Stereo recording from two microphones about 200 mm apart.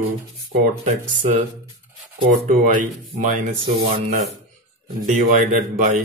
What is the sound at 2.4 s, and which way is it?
Speech, 40° right (ahead or behind).